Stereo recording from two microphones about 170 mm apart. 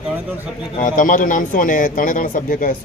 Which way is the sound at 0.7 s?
50° left (ahead or behind).